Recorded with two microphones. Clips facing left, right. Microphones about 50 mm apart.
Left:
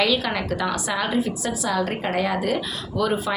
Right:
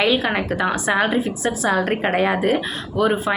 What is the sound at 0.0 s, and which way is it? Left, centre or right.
A woman's voice, right.